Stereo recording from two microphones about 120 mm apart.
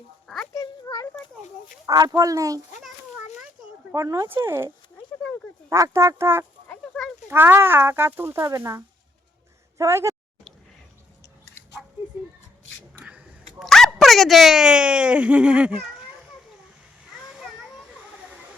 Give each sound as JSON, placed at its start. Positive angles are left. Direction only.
{"t": 0.5, "sound": "a sound", "side_deg": 30}
{"t": 1.9, "sound": "speech", "side_deg": -30}
{"t": 3.9, "sound": "speech", "side_deg": -25}
{"t": 6.7, "sound": "chicken", "side_deg": 5}
{"t": 7.3, "sound": "a woman's voice", "side_deg": -15}
{"t": 13.1, "sound": "a sound", "side_deg": -10}
{"t": 13.7, "sound": "speech", "side_deg": 0}